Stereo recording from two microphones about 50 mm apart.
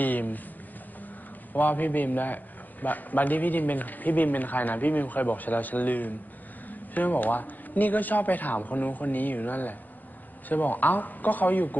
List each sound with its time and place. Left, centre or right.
0.0 s a man's voice: left
1.5 s a man's voice: left